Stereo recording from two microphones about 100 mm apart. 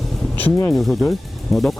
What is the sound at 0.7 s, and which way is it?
Speech, centre (ahead or behind).